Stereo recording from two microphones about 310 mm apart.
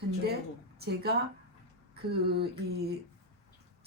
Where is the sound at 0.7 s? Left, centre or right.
Right.